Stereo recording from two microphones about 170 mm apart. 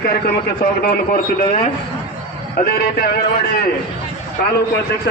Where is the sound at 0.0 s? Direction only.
60° left (ahead or behind).